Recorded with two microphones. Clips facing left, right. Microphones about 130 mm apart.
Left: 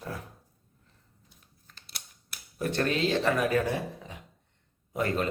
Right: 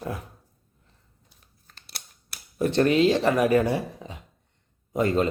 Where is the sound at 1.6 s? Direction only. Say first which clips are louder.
Right 3 dB; 70° right (ahead or behind).